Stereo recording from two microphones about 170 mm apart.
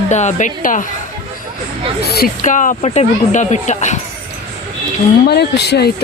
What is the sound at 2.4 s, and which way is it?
Speech, 50° left (ahead or behind).